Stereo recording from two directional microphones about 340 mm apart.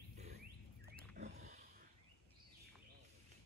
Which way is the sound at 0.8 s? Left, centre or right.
Right.